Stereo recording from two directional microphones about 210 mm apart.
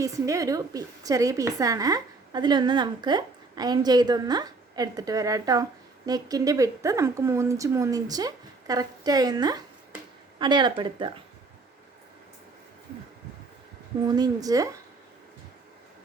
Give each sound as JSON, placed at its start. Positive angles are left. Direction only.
{"t": 0.0, "sound": "a woman's voice", "side_deg": -15}
{"t": 14.1, "sound": "a woman's voice", "side_deg": -20}